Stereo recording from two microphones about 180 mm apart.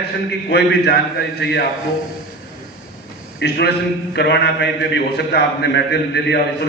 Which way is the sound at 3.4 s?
70° left (ahead or behind).